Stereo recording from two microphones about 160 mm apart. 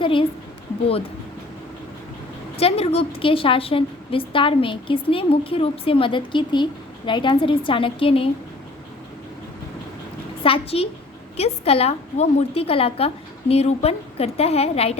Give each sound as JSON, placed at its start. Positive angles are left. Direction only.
{"t": 0.0, "sound": "a woman's voice", "side_deg": 30}
{"t": 2.6, "sound": "a woman's voice", "side_deg": 40}
{"t": 10.4, "sound": "a woman's voice", "side_deg": 35}